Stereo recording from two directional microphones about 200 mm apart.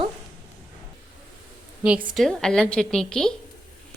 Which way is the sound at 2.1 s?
5° left (ahead or behind).